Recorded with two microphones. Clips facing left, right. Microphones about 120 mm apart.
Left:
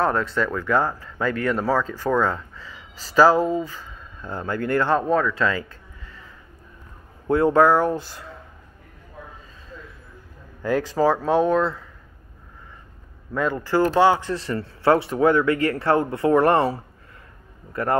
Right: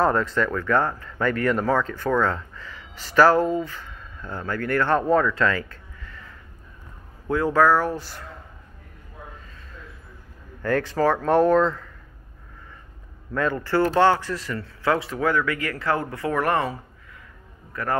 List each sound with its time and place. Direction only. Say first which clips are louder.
0.0 s speech: right 1 dB; centre (ahead or behind)
5.2 s a sound: even; 15° left (ahead or behind)
7.2 s speech: left 3 dB; 25° left (ahead or behind)
10.6 s speech: left 1 dB; 10° left (ahead or behind)
13.3 s speech: left 1 dB; 10° left (ahead or behind)
14.3 s speech: left 3 dB; 30° left (ahead or behind)